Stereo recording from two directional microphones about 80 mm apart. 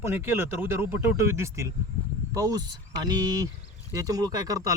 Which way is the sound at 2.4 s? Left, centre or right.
Right.